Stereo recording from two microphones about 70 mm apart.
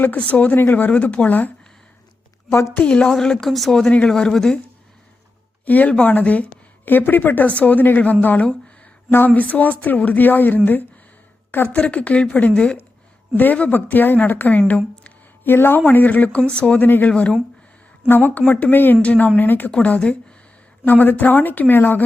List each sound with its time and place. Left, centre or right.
0.0 s speech: left
2.5 s a woman's voice: left
2.8 s speech: centre
5.6 s speech: left
11.7 s speech: centre
19.0 s speech: centre
19.7 s speech: centre